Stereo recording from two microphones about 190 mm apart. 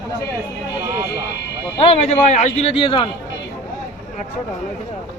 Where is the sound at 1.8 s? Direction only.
35° left (ahead or behind).